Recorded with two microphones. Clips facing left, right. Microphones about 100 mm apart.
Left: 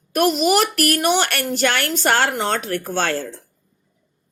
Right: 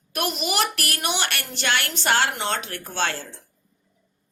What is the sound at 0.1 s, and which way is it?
A woman's voice, 40° left (ahead or behind).